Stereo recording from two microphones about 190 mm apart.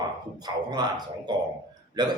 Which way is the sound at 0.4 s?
20° right (ahead or behind).